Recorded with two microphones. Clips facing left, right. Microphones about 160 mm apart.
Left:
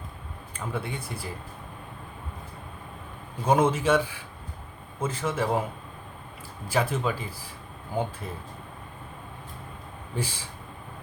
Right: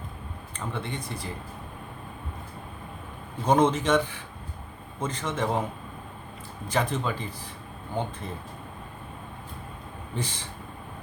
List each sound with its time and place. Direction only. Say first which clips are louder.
0.5 s speech: left 1 dB; 5° left (ahead or behind)
3.4 s speech: even; 5° left (ahead or behind)
6.7 s speech: left 1 dB; 5° left (ahead or behind)
10.2 s speech: left 1 dB; 10° left (ahead or behind)